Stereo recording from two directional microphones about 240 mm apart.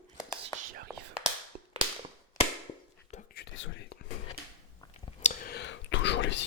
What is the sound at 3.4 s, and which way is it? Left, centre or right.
Whispering, left.